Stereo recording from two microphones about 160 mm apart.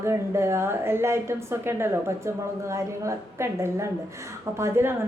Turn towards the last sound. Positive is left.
turn(degrees=-15)  # may be behind; listen again after turning